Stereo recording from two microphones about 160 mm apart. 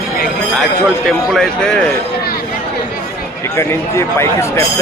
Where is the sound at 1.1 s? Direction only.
Centre (ahead or behind).